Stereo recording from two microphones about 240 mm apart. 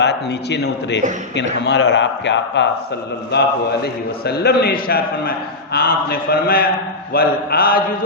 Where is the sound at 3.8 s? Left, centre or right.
Left.